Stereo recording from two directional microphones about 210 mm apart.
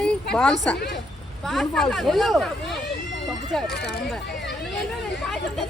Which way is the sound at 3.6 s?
50° left (ahead or behind).